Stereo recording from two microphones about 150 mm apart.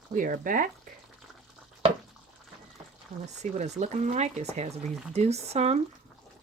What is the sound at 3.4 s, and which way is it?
Speech, 50° right (ahead or behind).